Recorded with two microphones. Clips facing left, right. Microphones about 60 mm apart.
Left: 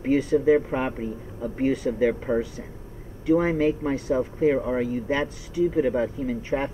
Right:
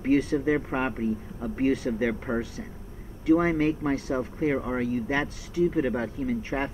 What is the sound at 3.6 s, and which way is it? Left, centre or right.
Speech, right.